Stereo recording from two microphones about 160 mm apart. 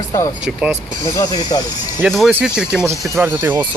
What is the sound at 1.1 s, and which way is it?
Speech, 25° left (ahead or behind).